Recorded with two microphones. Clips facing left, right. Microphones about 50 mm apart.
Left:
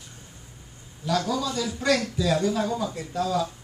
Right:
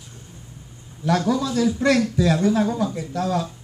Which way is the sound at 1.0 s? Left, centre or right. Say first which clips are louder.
Right 5 dB; right.